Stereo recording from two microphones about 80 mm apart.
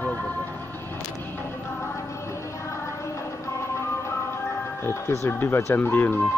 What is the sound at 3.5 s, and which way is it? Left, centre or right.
Music, left.